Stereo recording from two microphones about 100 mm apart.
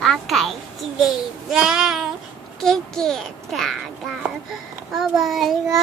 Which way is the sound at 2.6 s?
5° left (ahead or behind).